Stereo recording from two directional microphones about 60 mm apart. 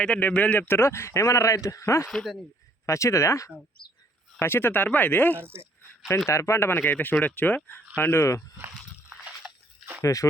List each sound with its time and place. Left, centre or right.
0.2 s speech: left
0.7 s a man's voice: left
2.0 s speech: centre
2.8 s a man's voice: left
4.4 s speech: left
6.2 s speech: left
6.7 s speech: left
7.9 s speech: left
10.0 s speech: left